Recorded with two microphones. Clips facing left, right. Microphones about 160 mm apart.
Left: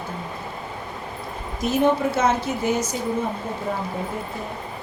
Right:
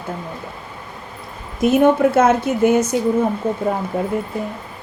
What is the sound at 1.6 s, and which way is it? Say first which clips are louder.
Speech: right 7 dB; 55° right (ahead or behind).